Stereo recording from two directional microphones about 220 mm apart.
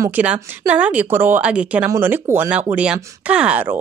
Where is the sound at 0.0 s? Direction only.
5° right (ahead or behind).